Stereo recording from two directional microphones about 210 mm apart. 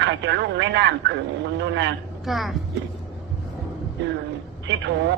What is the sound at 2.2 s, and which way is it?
Speech, centre (ahead or behind).